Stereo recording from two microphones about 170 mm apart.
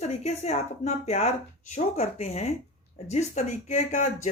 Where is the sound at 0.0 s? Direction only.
40° left (ahead or behind).